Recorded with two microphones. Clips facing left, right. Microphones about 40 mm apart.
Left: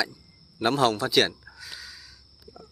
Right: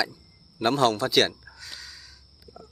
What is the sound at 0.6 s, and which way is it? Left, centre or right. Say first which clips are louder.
Gasp: right 1 dB; centre.